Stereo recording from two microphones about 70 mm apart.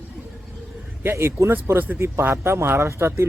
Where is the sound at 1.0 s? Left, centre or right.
Right.